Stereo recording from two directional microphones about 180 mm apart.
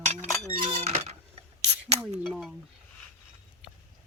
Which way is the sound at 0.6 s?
40° right (ahead or behind).